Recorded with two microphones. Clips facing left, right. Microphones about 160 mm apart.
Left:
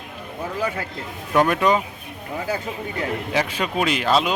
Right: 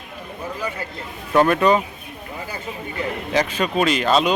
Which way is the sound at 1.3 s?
5° left (ahead or behind).